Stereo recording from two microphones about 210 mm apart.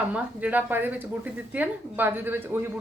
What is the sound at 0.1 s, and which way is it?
A woman's voice, 5° right (ahead or behind).